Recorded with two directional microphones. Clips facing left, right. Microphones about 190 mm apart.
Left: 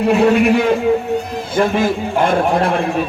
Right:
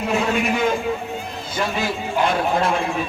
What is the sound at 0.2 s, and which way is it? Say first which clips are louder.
Speech: left 8 dB; 65° left (ahead or behind).